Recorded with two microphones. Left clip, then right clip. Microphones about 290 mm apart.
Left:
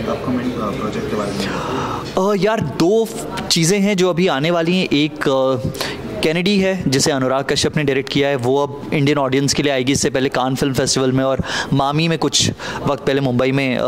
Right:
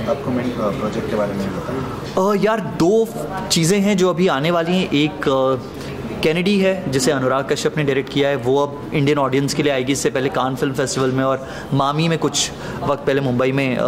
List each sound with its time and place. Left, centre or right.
2.1 s a man's voice: left